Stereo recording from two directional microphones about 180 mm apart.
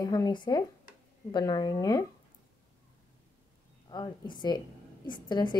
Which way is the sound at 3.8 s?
25° left (ahead or behind).